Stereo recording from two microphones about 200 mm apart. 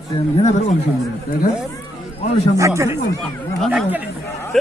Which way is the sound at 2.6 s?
15° right (ahead or behind).